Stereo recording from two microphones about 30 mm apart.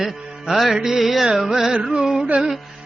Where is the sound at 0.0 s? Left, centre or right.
Centre.